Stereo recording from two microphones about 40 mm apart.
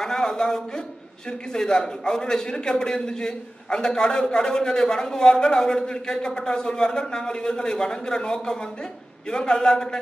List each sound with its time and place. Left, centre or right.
0.0 s a man's voice: centre